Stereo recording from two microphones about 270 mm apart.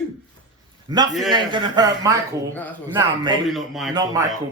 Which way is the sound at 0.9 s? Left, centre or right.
Centre.